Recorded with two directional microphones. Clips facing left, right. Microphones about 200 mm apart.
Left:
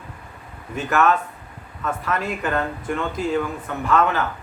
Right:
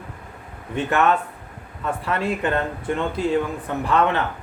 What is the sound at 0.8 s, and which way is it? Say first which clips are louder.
Speech: even; 30° right (ahead or behind).